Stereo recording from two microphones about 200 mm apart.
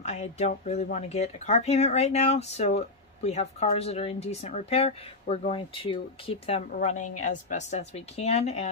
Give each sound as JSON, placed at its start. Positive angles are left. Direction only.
{"t": 0.0, "sound": "speech", "side_deg": 35}